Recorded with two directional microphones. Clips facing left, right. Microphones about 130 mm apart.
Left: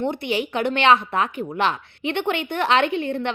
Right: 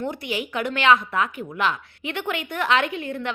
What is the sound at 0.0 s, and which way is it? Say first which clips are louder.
Speech: left 4 dB; 25° left (ahead or behind).